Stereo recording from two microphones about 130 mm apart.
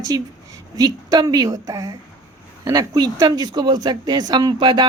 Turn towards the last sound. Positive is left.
turn(degrees=-35)  # may be behind; listen again after turning